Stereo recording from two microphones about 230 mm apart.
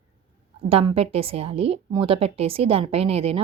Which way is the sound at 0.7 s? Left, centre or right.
Right.